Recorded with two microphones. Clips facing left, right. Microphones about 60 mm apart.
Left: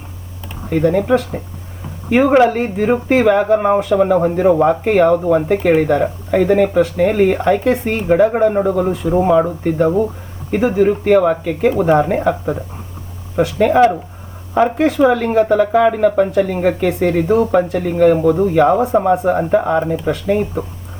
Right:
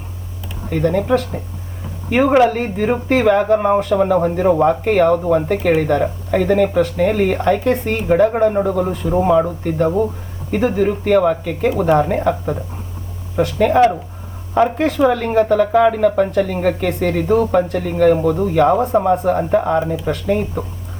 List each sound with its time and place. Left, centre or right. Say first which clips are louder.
0.7 s speech: left 2 dB; centre
2.4 s speech: left 1 dB; centre